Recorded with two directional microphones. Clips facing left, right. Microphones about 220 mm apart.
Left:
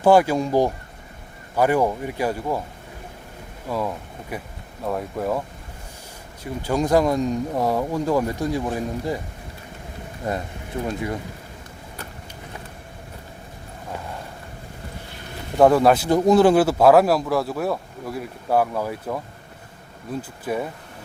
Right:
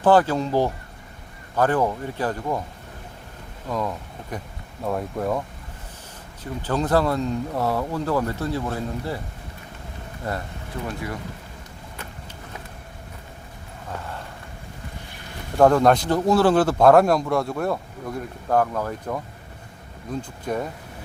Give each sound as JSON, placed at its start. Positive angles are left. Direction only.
{"t": 0.0, "sound": "speech", "side_deg": 10}
{"t": 3.7, "sound": "speech", "side_deg": 10}
{"t": 6.4, "sound": "speech", "side_deg": 10}
{"t": 10.3, "sound": "speech", "side_deg": 15}
{"t": 15.5, "sound": "speech", "side_deg": 5}